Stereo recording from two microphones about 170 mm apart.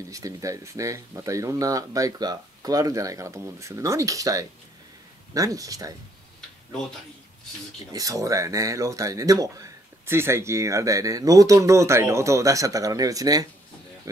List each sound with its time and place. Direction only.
0.0 s speech: 20° right (ahead or behind)
7.9 s speech: 20° right (ahead or behind)